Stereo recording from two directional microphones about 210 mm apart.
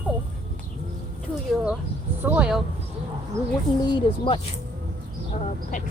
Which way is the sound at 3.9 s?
20° left (ahead or behind).